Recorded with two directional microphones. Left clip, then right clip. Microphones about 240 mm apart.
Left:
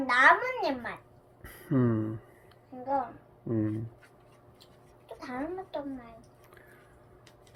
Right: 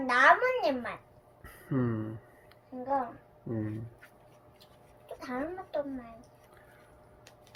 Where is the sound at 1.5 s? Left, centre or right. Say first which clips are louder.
Left 4 dB; left.